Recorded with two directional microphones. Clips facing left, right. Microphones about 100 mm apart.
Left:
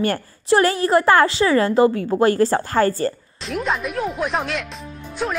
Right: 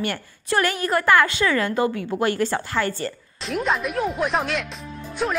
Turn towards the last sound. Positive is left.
turn(degrees=0)  # may be behind; listen again after turning